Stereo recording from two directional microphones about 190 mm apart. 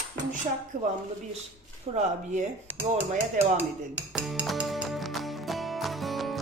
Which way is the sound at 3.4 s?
40° right (ahead or behind).